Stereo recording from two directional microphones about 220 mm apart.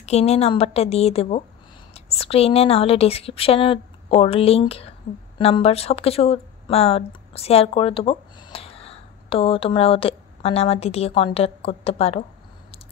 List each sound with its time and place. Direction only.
0.0 s speech: 30° left (ahead or behind)